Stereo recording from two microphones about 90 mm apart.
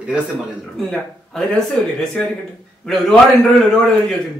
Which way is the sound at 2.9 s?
5° left (ahead or behind).